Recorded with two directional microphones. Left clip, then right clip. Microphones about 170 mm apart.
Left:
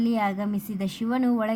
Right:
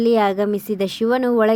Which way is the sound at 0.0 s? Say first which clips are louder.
Right 10 dB; 45° right (ahead or behind).